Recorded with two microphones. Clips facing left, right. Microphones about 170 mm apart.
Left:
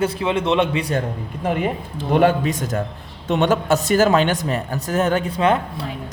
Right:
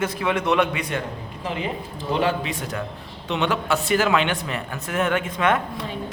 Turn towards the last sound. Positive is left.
turn(degrees=30)  # may be behind; listen again after turning